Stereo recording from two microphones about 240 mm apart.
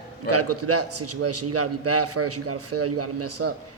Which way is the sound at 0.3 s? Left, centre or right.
Right.